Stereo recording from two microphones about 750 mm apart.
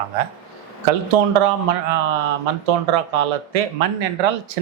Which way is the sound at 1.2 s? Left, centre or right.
Right.